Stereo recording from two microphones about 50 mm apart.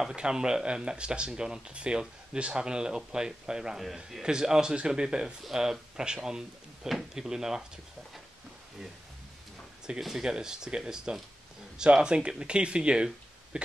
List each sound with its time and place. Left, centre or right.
0.1 s speech: centre
9.8 s speech: centre